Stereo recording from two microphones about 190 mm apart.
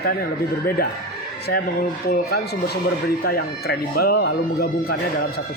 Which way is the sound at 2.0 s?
55° left (ahead or behind).